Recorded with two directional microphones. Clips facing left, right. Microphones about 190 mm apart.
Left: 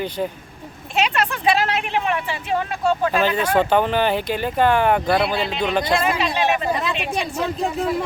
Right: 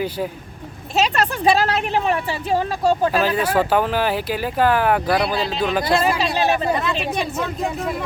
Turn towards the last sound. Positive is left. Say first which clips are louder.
# right 2 dB
turn(degrees=-35)  # may be behind; listen again after turning